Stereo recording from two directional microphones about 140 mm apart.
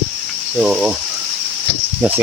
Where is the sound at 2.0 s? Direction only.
5° right (ahead or behind).